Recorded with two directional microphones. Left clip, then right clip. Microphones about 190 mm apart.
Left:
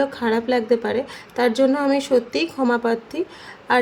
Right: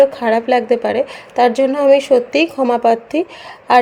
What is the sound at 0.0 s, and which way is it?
A woman's voice, 20° right (ahead or behind).